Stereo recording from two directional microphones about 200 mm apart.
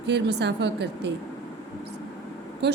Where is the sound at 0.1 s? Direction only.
60° right (ahead or behind).